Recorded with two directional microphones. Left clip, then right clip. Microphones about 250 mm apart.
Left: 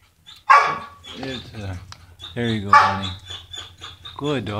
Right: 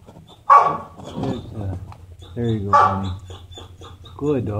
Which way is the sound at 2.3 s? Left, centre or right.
Left.